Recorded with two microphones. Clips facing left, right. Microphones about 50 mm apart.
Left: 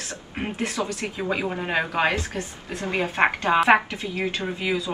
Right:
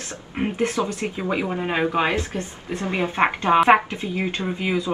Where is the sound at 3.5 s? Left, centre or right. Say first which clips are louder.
Right 5 dB; centre.